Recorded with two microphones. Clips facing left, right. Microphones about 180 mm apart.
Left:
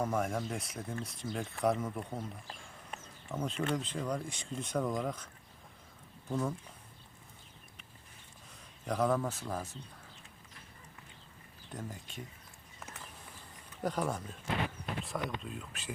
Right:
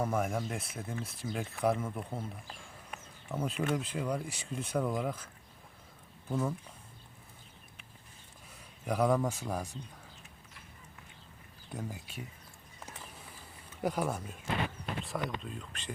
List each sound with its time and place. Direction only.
0.0 s speech: 5° right (ahead or behind)
8.8 s speech: 10° right (ahead or behind)
11.7 s speech: 10° right (ahead or behind)
13.8 s speech: 10° right (ahead or behind)